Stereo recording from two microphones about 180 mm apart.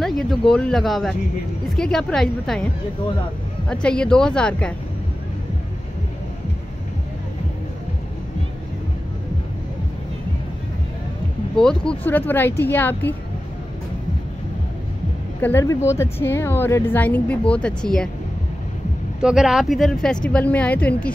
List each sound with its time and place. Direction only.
0.0 s speech: centre (ahead or behind)
3.6 s speech: 5° left (ahead or behind)
11.5 s a woman's voice: 5° left (ahead or behind)
15.4 s a woman's voice: 15° left (ahead or behind)
19.2 s speech: centre (ahead or behind)